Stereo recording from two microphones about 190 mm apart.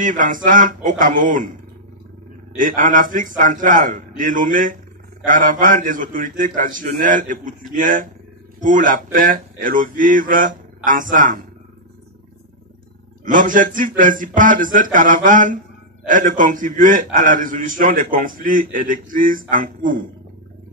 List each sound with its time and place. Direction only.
0.0 s a man's voice: 45° right (ahead or behind)
2.5 s a man's voice: 45° right (ahead or behind)
13.2 s a man's voice: 45° right (ahead or behind)